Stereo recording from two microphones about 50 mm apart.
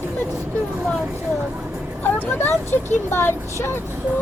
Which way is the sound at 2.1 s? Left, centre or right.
Left.